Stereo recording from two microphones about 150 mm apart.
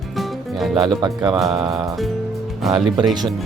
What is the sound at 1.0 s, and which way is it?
Speech, 30° right (ahead or behind).